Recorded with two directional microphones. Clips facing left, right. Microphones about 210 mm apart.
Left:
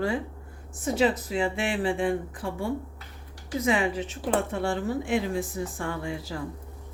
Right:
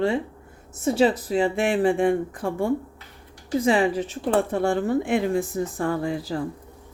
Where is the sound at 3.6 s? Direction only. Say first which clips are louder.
Right 4 dB; 35° right (ahead or behind).